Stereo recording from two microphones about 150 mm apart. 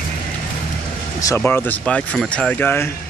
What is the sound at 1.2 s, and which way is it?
Speech, 15° left (ahead or behind).